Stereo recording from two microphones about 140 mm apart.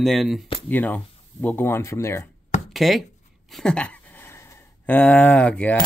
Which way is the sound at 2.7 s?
Centre (ahead or behind).